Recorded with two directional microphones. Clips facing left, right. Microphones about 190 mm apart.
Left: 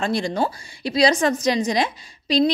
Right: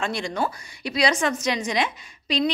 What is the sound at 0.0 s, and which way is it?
A woman's voice, 35° left (ahead or behind).